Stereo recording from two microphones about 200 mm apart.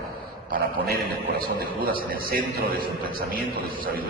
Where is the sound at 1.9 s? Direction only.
45° right (ahead or behind).